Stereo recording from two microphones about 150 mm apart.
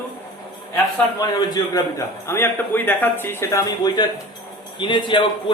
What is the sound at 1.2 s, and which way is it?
A man's voice, 25° left (ahead or behind).